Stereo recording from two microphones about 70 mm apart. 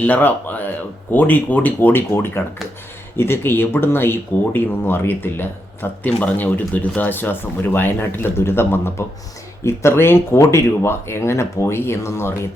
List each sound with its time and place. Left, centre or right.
0.0 s speech: left